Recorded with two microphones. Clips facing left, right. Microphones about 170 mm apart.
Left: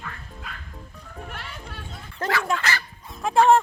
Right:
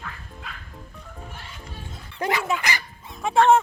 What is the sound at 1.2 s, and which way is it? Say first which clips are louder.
Music: left 5 dB; 70° left (ahead or behind).